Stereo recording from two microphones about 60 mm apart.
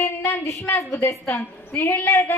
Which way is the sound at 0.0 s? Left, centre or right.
Left.